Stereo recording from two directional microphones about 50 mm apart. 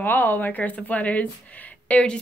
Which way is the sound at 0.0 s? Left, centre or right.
Left.